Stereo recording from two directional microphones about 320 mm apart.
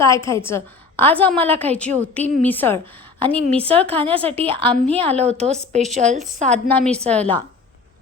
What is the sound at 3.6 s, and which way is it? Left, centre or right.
A woman's voice, centre.